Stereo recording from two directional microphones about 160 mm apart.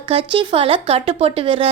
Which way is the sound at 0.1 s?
35° right (ahead or behind).